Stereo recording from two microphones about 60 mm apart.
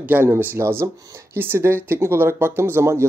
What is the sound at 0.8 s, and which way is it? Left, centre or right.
Speech, right.